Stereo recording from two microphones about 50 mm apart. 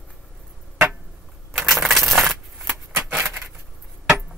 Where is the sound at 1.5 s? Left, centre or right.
Centre.